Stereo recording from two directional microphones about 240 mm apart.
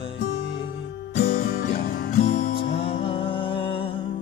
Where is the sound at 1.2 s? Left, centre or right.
Left.